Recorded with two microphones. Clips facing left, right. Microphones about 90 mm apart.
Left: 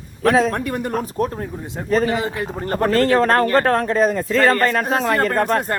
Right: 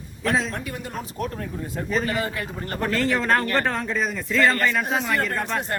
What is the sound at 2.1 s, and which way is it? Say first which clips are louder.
Speech: left 5 dB; 20° left (ahead or behind).